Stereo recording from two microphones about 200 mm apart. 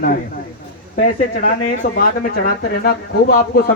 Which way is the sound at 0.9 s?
40° left (ahead or behind).